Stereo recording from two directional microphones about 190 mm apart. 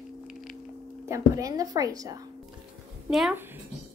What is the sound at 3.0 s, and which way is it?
Speech, centre (ahead or behind).